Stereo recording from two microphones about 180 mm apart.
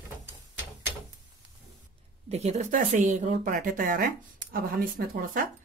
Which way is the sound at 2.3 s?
40° right (ahead or behind).